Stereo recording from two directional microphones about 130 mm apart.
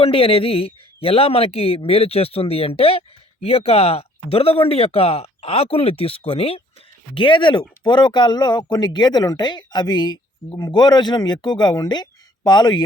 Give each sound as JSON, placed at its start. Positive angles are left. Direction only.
{"t": 0.0, "sound": "speech", "side_deg": 45}